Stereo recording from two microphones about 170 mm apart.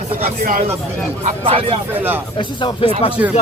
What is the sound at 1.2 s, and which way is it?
Speech, 35° right (ahead or behind).